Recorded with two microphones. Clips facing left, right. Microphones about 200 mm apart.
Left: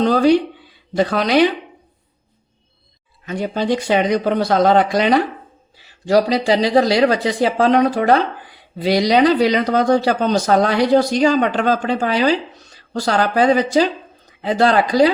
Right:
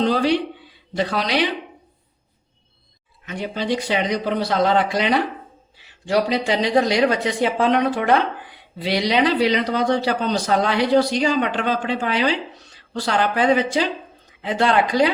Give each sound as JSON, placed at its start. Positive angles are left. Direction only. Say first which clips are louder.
{"t": 0.0, "sound": "speech", "louder": "left 5 dB", "side_deg": 45}
{"t": 3.2, "sound": "speech", "louder": "left 5 dB", "side_deg": 45}